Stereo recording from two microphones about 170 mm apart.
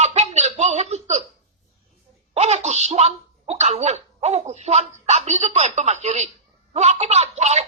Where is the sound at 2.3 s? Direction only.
40° right (ahead or behind).